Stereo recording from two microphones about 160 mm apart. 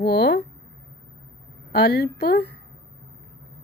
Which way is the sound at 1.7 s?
85° left.